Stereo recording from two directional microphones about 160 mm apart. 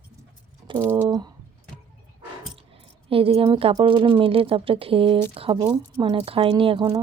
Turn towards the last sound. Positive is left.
turn(degrees=-30)  # may be behind; listen again after turning